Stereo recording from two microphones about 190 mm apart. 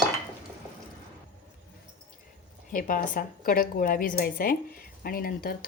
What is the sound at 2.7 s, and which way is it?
Speech, 45° left (ahead or behind).